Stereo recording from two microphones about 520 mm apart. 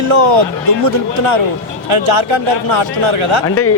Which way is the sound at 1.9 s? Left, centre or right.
Right.